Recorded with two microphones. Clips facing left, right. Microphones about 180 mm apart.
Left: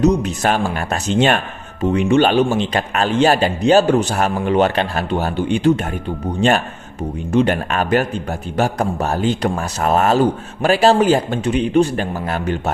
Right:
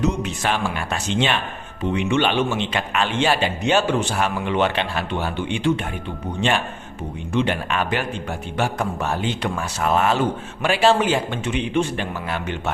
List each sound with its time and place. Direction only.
0.0 s a man's voice: 40° left (ahead or behind)
7.3 s a man's voice: 45° left (ahead or behind)